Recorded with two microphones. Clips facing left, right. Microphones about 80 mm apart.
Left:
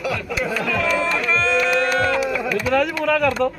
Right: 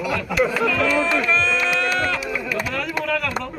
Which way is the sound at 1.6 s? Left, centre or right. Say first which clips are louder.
Left 3 dB; left.